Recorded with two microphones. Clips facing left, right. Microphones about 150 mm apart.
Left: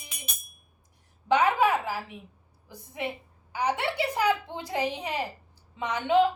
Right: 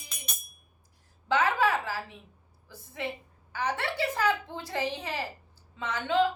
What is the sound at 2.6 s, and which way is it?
A woman's voice, 15° left (ahead or behind).